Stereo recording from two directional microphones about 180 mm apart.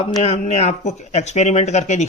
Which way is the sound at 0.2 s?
35° left (ahead or behind).